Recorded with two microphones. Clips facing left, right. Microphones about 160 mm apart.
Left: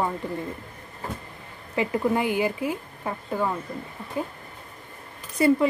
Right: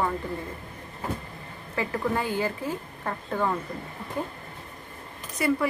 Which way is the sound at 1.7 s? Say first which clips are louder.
Left 4 dB; 15° left (ahead or behind).